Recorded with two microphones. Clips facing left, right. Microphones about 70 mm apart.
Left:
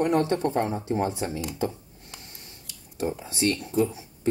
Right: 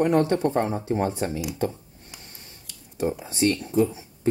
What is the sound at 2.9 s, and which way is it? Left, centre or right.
Speech, centre.